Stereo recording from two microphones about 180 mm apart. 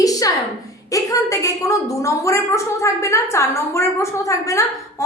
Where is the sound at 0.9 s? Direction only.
20° left (ahead or behind).